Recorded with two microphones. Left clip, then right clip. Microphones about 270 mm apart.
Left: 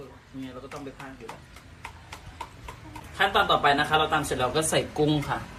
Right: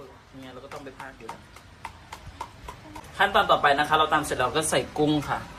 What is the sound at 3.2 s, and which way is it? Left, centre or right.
Speech, centre.